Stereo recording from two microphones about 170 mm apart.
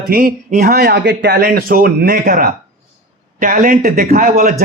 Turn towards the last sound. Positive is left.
turn(degrees=-50)  # may be behind; listen again after turning